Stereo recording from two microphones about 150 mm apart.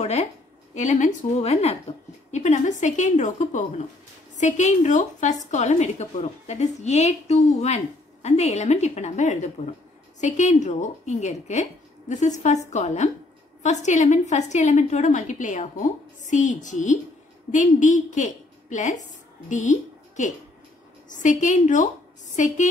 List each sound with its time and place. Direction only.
0.0 s a woman's voice: 45° left (ahead or behind)